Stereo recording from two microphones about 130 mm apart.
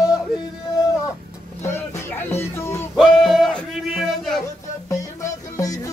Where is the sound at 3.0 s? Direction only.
Centre (ahead or behind).